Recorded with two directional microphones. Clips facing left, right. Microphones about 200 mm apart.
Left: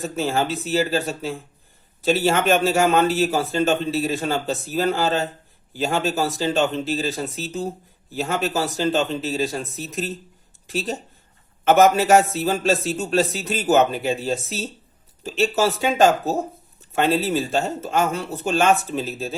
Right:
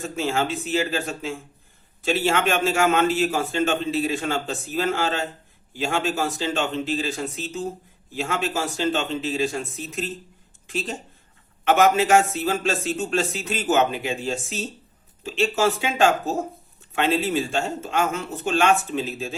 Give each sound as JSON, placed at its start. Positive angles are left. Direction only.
{"t": 0.0, "sound": "a man's voice", "side_deg": 40}